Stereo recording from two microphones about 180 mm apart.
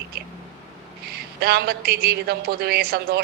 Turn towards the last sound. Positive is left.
turn(degrees=-60)  # may be behind; listen again after turning